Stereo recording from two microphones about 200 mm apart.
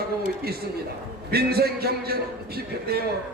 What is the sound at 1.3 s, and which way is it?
Speech, 50° right (ahead or behind).